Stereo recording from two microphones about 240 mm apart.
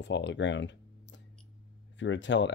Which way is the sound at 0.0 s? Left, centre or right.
Left.